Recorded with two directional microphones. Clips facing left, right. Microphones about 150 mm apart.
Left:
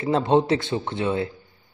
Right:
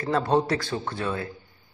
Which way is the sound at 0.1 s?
20° left (ahead or behind).